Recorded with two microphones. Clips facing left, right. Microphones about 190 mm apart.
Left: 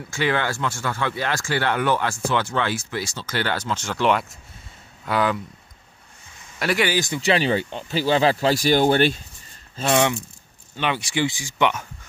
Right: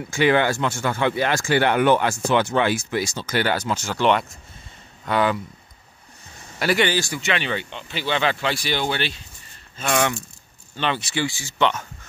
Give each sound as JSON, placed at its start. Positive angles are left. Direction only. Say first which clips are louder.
{"t": 0.1, "sound": "speech", "louder": "right 5 dB", "side_deg": -15}
{"t": 6.6, "sound": "speech", "louder": "right 2 dB", "side_deg": 0}
{"t": 6.9, "sound": "speech", "louder": "left 1 dB", "side_deg": 20}
{"t": 7.2, "sound": "speech", "louder": "left 5 dB", "side_deg": 35}
{"t": 9.8, "sound": "speech", "louder": "left 2 dB", "side_deg": 25}